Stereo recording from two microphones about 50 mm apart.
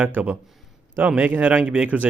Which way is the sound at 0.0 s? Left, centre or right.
Right.